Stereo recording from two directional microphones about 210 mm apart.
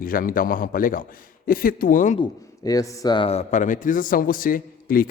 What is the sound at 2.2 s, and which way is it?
Speech, 15° left (ahead or behind).